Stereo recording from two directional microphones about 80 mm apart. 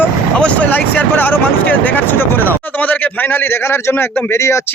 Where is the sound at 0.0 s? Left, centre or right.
Centre; by 4.6 s left.